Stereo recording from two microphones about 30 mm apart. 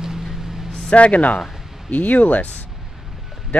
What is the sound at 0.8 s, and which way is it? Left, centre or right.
Speech, left.